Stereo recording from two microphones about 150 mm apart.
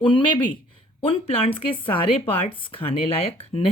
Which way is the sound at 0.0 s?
30° left (ahead or behind).